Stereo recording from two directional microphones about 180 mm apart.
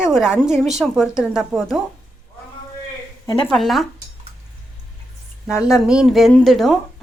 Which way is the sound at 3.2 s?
20° left (ahead or behind).